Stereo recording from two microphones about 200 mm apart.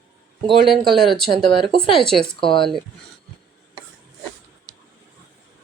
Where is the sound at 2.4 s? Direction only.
25° left (ahead or behind).